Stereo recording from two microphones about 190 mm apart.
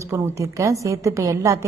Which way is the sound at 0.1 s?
15° right (ahead or behind).